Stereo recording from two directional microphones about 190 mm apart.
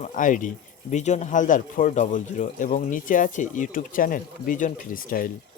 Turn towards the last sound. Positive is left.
turn(degrees=45)  # may be behind; listen again after turning